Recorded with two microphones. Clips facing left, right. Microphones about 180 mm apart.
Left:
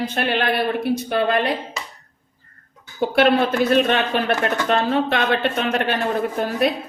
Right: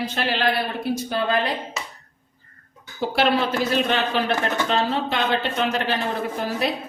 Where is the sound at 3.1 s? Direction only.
55° left (ahead or behind).